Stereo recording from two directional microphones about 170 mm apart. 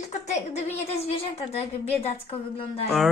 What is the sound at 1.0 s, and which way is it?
Speech, 35° left (ahead or behind).